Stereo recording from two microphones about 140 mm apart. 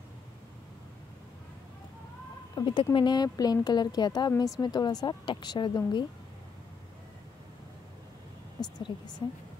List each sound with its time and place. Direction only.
2.5 s speech: 35° left (ahead or behind)
8.5 s speech: 30° left (ahead or behind)